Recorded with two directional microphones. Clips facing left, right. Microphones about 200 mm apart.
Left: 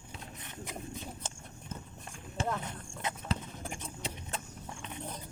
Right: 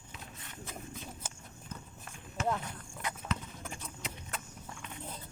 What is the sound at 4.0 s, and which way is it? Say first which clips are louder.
Vehicle: left 3 dB; 25° left (ahead or behind).